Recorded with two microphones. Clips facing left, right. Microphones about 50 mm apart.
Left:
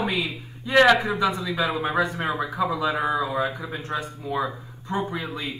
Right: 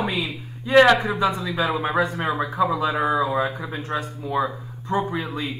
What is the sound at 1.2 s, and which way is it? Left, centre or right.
Speech, right.